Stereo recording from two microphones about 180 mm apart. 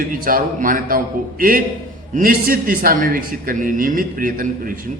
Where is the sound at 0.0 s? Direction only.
50° right (ahead or behind).